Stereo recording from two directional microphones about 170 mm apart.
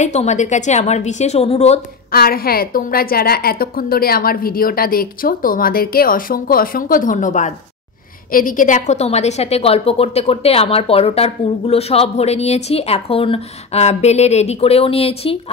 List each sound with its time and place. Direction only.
0.0 s a woman's voice: 45° left (ahead or behind)
2.1 s a woman's voice: 60° left (ahead or behind); by 15.3 s 35° left (ahead or behind)